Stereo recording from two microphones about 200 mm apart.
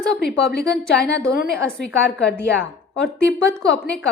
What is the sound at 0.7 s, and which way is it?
Speech, 5° left (ahead or behind).